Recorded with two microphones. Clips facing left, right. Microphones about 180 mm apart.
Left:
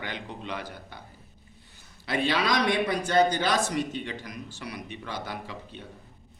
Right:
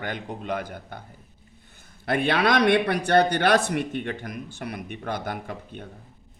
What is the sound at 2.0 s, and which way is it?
Speech, 55° right (ahead or behind).